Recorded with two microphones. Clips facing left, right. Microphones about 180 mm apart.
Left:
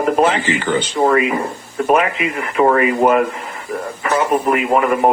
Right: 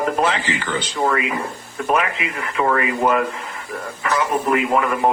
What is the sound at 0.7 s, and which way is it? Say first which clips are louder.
Speech: left 6 dB; 35° left (ahead or behind).